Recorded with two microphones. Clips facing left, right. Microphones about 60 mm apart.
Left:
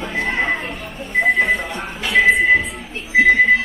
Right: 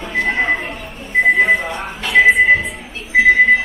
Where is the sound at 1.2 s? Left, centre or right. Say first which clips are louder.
Right 4 dB; centre.